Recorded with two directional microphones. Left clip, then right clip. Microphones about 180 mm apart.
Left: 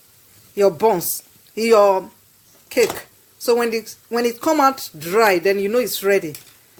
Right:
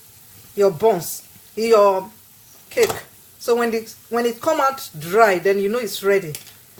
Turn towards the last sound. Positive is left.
turn(degrees=55)  # may be behind; listen again after turning